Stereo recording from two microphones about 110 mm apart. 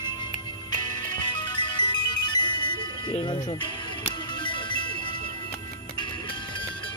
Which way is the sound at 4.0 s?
45° left (ahead or behind).